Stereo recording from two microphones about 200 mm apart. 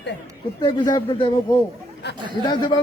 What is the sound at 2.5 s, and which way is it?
Speech, 20° left (ahead or behind).